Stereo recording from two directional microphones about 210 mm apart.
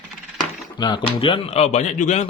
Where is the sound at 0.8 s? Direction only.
20° left (ahead or behind).